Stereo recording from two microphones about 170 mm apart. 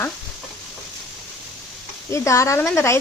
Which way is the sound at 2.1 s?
15° left (ahead or behind).